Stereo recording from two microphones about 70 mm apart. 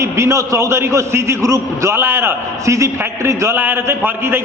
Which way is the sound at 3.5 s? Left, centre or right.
Right.